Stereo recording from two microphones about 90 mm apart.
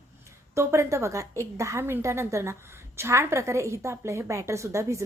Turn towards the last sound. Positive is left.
turn(degrees=-35)  # may be behind; listen again after turning